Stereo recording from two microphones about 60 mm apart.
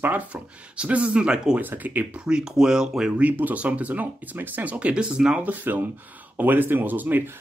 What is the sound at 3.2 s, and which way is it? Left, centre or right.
Speech, right.